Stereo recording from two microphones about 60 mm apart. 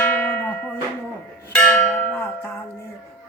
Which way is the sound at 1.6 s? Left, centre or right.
Left.